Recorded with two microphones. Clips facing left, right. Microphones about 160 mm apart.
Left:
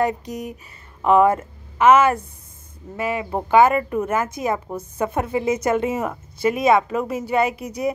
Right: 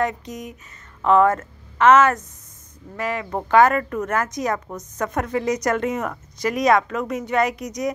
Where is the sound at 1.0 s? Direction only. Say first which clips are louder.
Left 1 dB; 10° left (ahead or behind).